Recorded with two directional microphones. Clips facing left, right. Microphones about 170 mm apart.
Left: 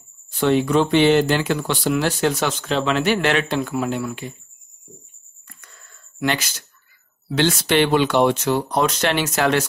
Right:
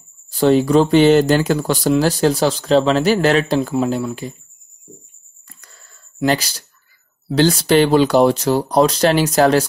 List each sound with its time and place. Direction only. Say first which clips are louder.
0.3 s speech: right 5 dB; 35° right (ahead or behind)
5.5 s a sound: right 1 dB; 30° right (ahead or behind)
7.2 s speech: right 5 dB; 35° right (ahead or behind)